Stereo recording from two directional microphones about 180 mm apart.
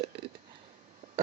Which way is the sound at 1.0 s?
45° right (ahead or behind).